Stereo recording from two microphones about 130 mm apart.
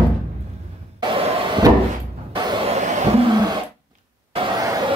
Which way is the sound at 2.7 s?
65° right (ahead or behind).